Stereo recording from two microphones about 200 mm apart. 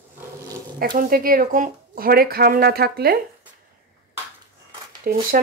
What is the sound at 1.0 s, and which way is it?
Speech, 45° right (ahead or behind).